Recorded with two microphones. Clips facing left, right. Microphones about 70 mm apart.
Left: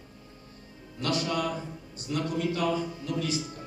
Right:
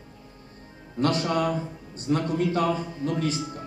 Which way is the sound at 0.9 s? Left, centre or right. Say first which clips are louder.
Right 5 dB; right.